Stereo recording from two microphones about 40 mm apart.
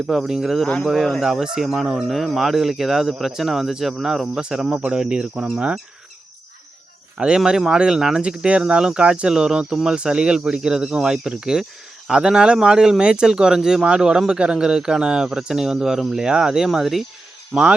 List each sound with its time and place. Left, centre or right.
0.1 s speech: centre
7.2 s speech: right
13.9 s speech: right
17.5 s speech: right